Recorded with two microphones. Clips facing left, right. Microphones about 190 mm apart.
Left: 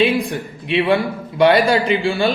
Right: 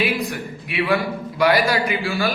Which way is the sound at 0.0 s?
30° left (ahead or behind).